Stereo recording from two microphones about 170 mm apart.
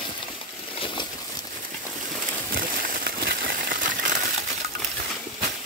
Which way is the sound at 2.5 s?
55° right (ahead or behind).